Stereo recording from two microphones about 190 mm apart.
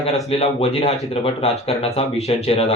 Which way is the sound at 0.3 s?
30° left (ahead or behind).